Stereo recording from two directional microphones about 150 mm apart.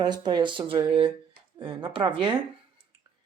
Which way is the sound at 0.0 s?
30° right (ahead or behind).